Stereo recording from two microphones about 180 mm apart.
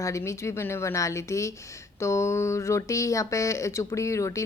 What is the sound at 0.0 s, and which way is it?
A woman's voice, 15° left (ahead or behind).